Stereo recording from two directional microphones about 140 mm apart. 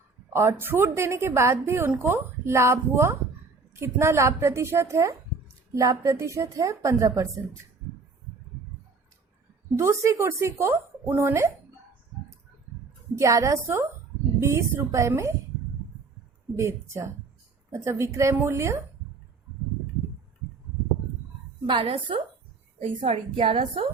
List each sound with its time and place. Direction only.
0.3 s a woman's voice: 15° right (ahead or behind)
9.7 s a woman's voice: 20° right (ahead or behind)
13.1 s a woman's voice: 25° right (ahead or behind)
16.6 s a woman's voice: 20° right (ahead or behind)
21.7 s a woman's voice: 35° right (ahead or behind)